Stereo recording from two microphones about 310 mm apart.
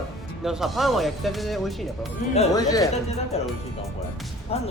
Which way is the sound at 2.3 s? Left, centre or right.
Centre.